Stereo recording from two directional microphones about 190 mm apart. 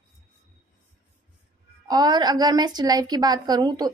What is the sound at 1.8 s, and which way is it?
A woman's voice, 20° right (ahead or behind).